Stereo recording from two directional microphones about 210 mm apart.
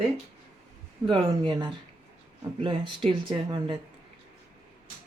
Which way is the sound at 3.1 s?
25° right (ahead or behind).